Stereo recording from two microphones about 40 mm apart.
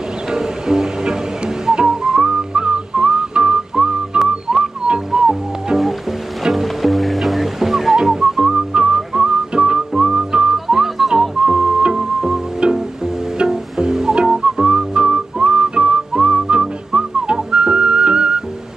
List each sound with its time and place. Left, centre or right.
0.3 s music: centre
4.5 s whistling: centre
4.8 s music: right
6.4 s music: centre
8.9 s whistling: centre
9.5 s whistling: right; by 11.2 s centre
11.4 s music: right